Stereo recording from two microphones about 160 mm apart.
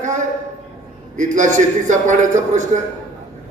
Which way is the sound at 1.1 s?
50° right (ahead or behind).